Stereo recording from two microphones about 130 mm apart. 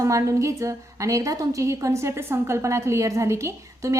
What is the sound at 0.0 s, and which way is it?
A woman's voice, 25° right (ahead or behind).